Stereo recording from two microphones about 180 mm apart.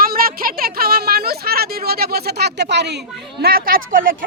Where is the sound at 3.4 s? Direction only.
55° right (ahead or behind).